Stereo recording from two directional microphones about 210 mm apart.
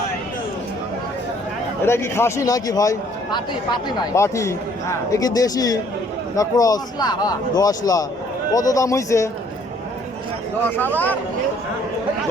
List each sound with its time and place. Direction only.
1.8 s a man's voice: 10° left (ahead or behind)
10.7 s a man's voice: 10° left (ahead or behind)